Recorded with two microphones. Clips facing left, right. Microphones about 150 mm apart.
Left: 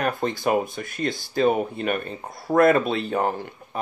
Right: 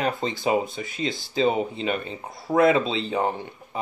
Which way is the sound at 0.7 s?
55° left (ahead or behind).